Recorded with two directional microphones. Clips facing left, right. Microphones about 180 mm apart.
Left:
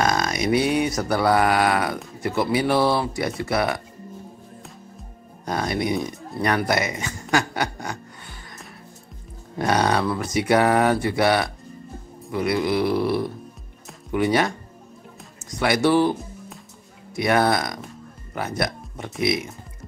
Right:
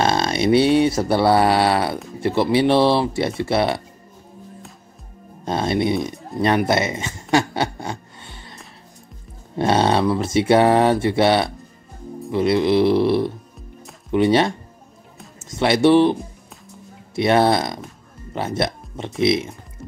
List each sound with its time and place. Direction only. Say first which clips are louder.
0.0 s mantra: right 3 dB; 30° right (ahead or behind)
5.4 s mantra: right 4 dB; 25° right (ahead or behind)
6.3 s speech: right 4 dB; 20° right (ahead or behind)
9.6 s mantra: right 3 dB; 25° right (ahead or behind)
15.5 s mantra: right 5 dB; 25° right (ahead or behind)
18.3 s speech: right 3 dB; 25° right (ahead or behind)